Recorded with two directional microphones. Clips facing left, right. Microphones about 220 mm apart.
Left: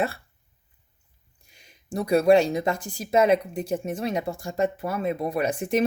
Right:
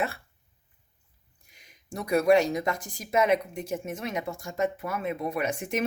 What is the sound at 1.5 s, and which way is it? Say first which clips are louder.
Speech: left 7 dB; 30° left (ahead or behind).